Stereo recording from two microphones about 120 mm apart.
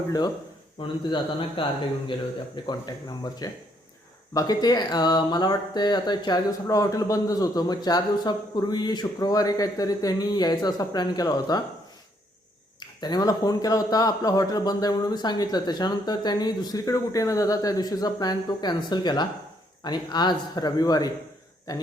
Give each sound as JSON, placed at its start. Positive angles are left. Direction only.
{"t": 0.8, "sound": "a man's voice", "side_deg": 45}
{"t": 2.6, "sound": "speech", "side_deg": 35}
{"t": 13.0, "sound": "speech", "side_deg": 35}